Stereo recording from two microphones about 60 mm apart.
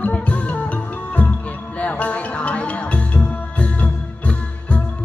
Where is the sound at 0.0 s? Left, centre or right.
Left.